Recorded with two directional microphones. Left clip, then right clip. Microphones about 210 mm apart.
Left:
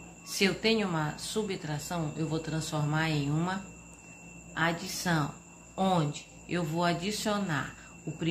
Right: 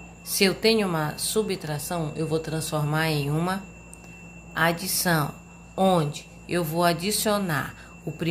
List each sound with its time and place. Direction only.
0.3 s a woman's voice: 30° right (ahead or behind)